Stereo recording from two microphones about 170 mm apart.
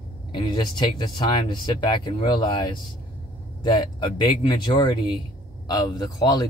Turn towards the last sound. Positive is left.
turn(degrees=25)  # may be behind; listen again after turning